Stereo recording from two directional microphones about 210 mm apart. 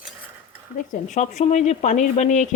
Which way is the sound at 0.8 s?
35° left (ahead or behind).